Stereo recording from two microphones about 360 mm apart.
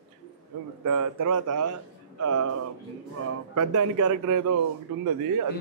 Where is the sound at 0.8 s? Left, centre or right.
Right.